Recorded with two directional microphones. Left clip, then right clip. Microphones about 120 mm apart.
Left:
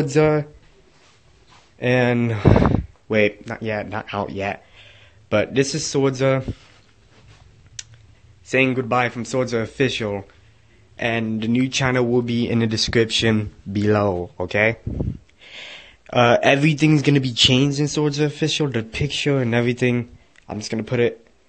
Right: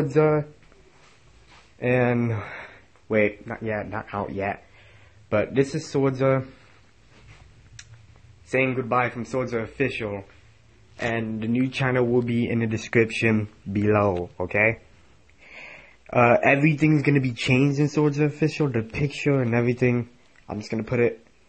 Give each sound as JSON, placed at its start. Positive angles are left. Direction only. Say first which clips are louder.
{"t": 0.0, "sound": "speech", "louder": "left 3 dB", "side_deg": 35}
{"t": 1.8, "sound": "speech", "louder": "left 3 dB", "side_deg": 25}
{"t": 8.5, "sound": "speech", "louder": "left 4 dB", "side_deg": 40}
{"t": 11.0, "sound": "speech", "louder": "left 4 dB", "side_deg": 25}
{"t": 20.7, "sound": "speech", "louder": "left 2 dB", "side_deg": 10}